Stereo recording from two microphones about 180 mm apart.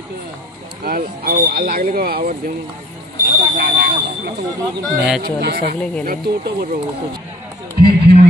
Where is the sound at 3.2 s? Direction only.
65° right (ahead or behind).